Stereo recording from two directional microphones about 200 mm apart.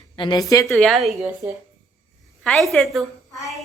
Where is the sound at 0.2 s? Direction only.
20° left (ahead or behind).